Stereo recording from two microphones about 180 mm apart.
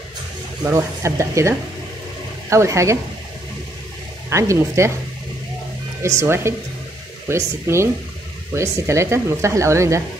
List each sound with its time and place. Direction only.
0.7 s a woman's voice: 15° right (ahead or behind)
2.5 s a woman's voice: 15° right (ahead or behind)
4.3 s a woman's voice: 15° right (ahead or behind)
6.0 s a woman's voice: 15° right (ahead or behind)